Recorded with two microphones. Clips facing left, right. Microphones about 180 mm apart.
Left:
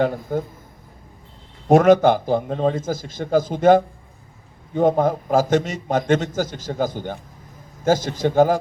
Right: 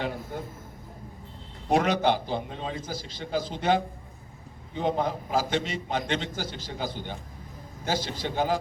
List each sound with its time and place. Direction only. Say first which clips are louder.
1.7 s a man's voice: left 10 dB; 50° left (ahead or behind)